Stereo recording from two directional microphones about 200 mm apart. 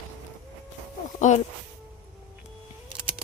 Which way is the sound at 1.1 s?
40° left (ahead or behind).